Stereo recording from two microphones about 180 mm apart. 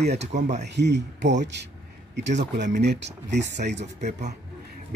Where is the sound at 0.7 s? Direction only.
70° right (ahead or behind).